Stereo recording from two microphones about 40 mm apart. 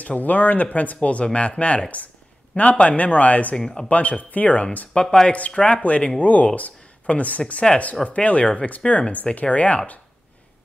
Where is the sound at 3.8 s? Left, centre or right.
Left.